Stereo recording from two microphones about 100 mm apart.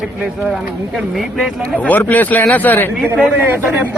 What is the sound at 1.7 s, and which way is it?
Speech, 15° left (ahead or behind).